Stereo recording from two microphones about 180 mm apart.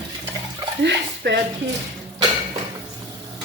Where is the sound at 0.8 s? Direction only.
70° right (ahead or behind).